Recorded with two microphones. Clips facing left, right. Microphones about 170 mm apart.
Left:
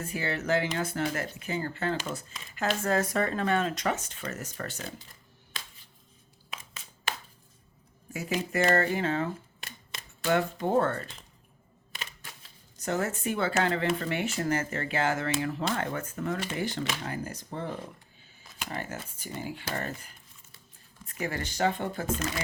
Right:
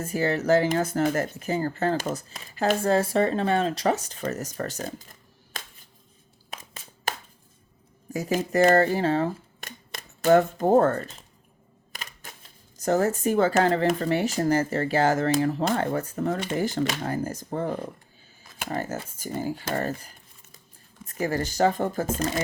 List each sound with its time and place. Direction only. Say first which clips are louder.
0.0 s speech: right 7 dB; 40° right (ahead or behind)
5.5 s music: right 4 dB; 45° right (ahead or behind)
6.5 s a sound: right 3 dB; 40° right (ahead or behind)
8.1 s speech: right 6 dB; 40° right (ahead or behind)